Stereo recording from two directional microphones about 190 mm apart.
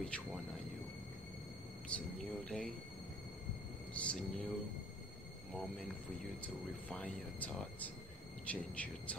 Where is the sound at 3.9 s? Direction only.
5° left (ahead or behind).